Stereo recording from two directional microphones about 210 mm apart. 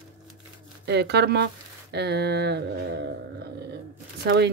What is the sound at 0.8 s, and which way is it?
Speech, 55° right (ahead or behind).